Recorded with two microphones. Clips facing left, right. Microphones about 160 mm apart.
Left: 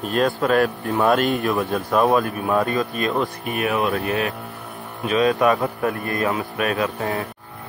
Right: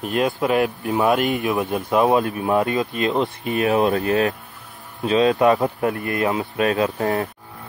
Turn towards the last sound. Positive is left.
turn(degrees=-35)  # may be behind; listen again after turning